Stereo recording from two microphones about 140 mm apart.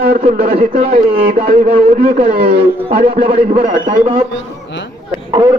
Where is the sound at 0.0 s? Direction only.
50° right (ahead or behind); by 2.3 s 70° right (ahead or behind).